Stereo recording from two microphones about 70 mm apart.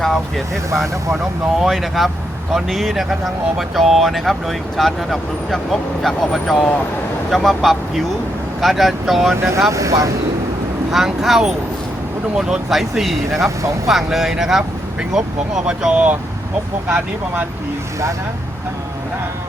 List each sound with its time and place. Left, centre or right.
0.0 s speech: centre
9.3 s speech: right
10.9 s speech: centre